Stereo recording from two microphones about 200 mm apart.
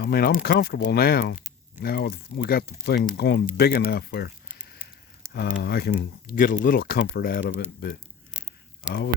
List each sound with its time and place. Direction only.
0.0 s speech: 50° left (ahead or behind)
5.3 s speech: 55° left (ahead or behind)
6.0 s speech: 45° left (ahead or behind)